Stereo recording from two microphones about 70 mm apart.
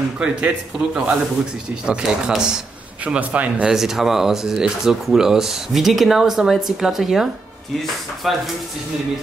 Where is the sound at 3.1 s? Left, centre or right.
Right.